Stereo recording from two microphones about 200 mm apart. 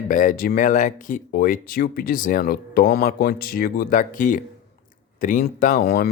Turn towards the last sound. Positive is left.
turn(degrees=50)  # may be behind; listen again after turning